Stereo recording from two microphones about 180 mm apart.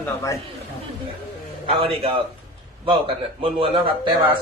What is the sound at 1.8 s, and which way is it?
A man's voice, 30° right (ahead or behind).